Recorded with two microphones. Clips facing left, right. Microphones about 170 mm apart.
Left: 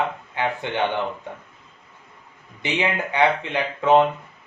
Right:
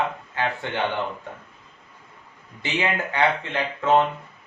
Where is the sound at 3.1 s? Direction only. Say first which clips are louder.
Left 3 dB; 15° left (ahead or behind).